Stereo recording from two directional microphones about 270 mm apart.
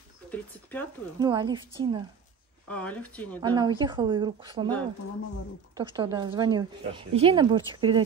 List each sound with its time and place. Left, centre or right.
0.3 s speech: centre
1.2 s speech: centre
2.7 s speech: centre
3.4 s speech: centre
5.8 s speech: centre